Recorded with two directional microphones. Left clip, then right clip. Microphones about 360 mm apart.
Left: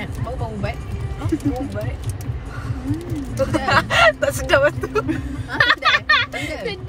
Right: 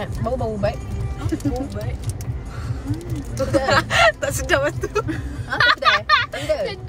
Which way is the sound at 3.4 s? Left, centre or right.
Centre.